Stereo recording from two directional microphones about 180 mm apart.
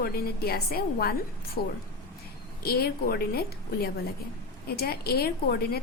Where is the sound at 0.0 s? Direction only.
60° left (ahead or behind).